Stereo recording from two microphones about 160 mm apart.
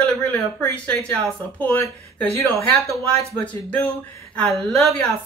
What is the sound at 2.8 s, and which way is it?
Speech, 20° right (ahead or behind).